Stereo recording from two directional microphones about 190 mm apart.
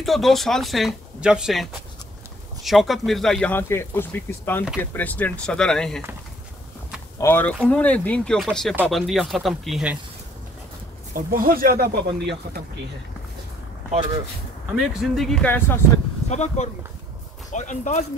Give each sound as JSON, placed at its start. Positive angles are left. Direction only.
{"t": 0.0, "sound": "speech", "side_deg": 0}
{"t": 7.2, "sound": "speech", "side_deg": 10}
{"t": 11.1, "sound": "speech", "side_deg": -50}
{"t": 14.8, "sound": "speech", "side_deg": 0}
{"t": 16.3, "sound": "speech", "side_deg": 35}